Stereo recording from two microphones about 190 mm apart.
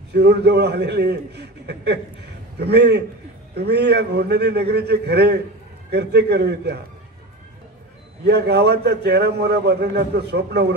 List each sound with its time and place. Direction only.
0.1 s a man's voice: 60° right (ahead or behind)
8.3 s a man's voice: 60° right (ahead or behind)